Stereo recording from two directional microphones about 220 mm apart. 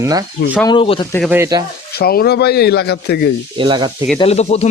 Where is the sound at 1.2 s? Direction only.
10° right (ahead or behind).